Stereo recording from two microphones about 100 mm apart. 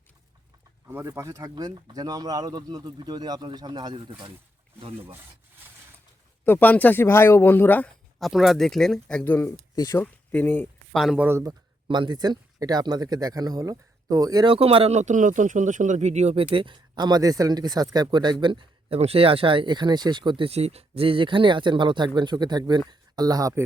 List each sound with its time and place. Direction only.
1.0 s speech: 30° right (ahead or behind)
1.4 s speech: 45° right (ahead or behind)
4.8 s speech: 65° right (ahead or behind)
6.4 s speech: 20° left (ahead or behind)
8.2 s speech: centre (ahead or behind); by 9.5 s 20° left (ahead or behind)
9.7 s speech: 35° left (ahead or behind)
10.0 s speech: 20° left (ahead or behind)
10.9 s speech: centre (ahead or behind)
11.2 s speech: 25° right (ahead or behind)
11.9 s speech: 50° right (ahead or behind)
14.4 s speech: 65° right (ahead or behind)
16.0 s speech: 90° right; by 18.9 s 55° right (ahead or behind)
18.9 s speech: 80° right; by 20.5 s 55° right (ahead or behind)
20.5 s speech: 90° right; by 23.6 s 35° right (ahead or behind)